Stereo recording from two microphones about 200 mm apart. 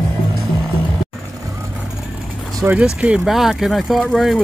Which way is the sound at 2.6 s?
5° right (ahead or behind).